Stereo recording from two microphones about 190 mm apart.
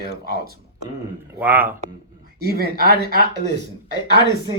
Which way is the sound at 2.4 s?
55° right (ahead or behind).